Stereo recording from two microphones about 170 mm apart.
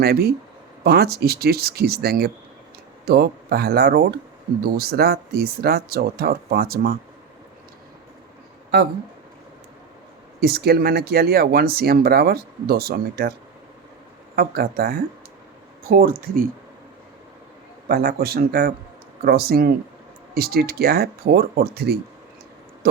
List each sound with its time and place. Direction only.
0.0 s speech: 65° right (ahead or behind)
10.4 s speech: 70° right (ahead or behind)
14.3 s speech: 60° right (ahead or behind)
17.8 s speech: 65° right (ahead or behind)